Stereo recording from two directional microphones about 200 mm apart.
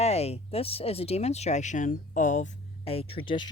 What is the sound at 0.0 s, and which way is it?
Speech, 30° left (ahead or behind).